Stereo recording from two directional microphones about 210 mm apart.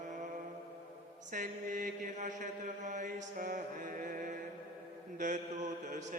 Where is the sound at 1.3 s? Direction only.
40° right (ahead or behind).